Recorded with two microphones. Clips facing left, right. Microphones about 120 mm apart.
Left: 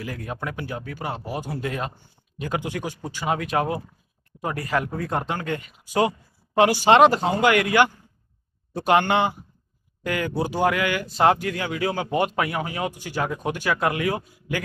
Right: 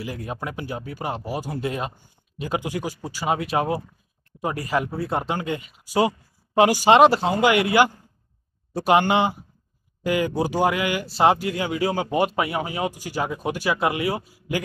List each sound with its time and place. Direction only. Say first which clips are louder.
0.3 s a man's voice: left 1 dB; 15° right (ahead or behind)